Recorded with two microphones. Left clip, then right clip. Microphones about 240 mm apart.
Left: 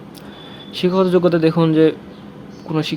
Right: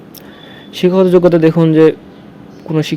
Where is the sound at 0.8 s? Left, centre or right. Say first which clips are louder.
Right 6 dB; right.